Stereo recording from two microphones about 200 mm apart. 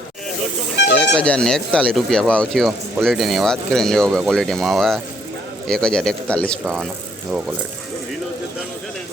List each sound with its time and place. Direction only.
0.8 s speech: 60° left (ahead or behind)
1.1 s speech: 5° left (ahead or behind)